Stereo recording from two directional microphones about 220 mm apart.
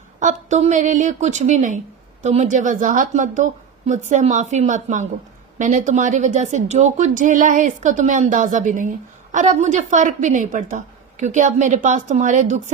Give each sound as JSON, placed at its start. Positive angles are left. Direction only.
{"t": 0.2, "sound": "a woman's voice", "side_deg": -35}